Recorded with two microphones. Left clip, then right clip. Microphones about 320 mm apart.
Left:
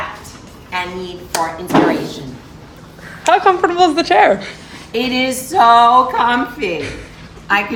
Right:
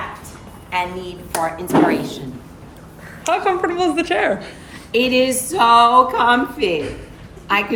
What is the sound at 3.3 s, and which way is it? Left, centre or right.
A woman's voice, left.